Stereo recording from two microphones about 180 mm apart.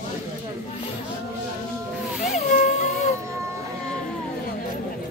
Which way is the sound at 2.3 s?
45° left (ahead or behind).